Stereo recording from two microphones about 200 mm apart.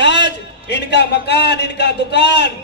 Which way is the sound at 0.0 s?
60° left (ahead or behind).